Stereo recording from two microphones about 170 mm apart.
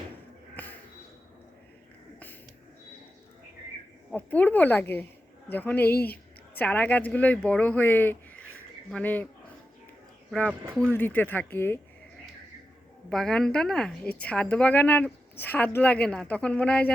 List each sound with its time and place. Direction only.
0.5 s a sound: 10° left (ahead or behind)
4.1 s speech: 10° left (ahead or behind)
5.9 s speech: 65° left (ahead or behind)
6.5 s speech: 10° left (ahead or behind)
10.8 s speech: 10° left (ahead or behind)
13.1 s speech: 5° left (ahead or behind)